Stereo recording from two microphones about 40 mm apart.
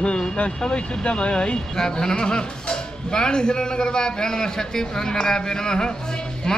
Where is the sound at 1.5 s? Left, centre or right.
Centre.